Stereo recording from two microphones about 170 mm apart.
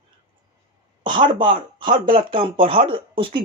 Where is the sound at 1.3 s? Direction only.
30° right (ahead or behind).